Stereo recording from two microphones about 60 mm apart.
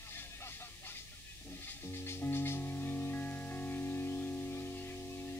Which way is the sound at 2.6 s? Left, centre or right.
Left.